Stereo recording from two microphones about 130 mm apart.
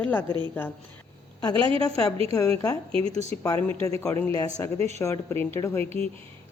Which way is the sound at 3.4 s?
25° left (ahead or behind).